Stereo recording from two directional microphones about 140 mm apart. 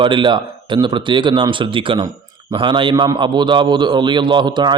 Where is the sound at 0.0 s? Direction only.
35° right (ahead or behind).